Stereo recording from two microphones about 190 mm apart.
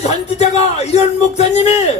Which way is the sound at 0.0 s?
35° left (ahead or behind).